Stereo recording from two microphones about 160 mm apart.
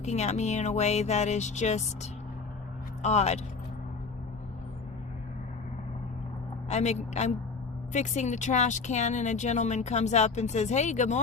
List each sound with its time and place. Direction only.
0.0 s speech: 45° left (ahead or behind)
6.7 s speech: 45° left (ahead or behind)